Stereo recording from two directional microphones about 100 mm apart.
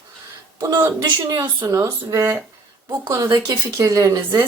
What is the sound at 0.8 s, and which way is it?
Speech, 35° right (ahead or behind).